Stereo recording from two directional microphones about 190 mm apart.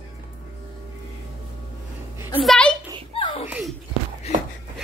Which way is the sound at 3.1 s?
25° left (ahead or behind).